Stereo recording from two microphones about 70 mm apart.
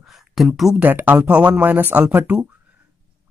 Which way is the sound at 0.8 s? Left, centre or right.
Right.